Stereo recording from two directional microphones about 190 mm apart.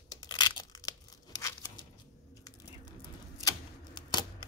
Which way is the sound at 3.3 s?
20° left (ahead or behind).